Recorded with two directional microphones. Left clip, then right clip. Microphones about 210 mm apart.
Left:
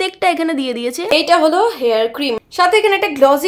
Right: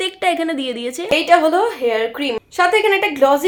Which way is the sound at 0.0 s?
30° left (ahead or behind).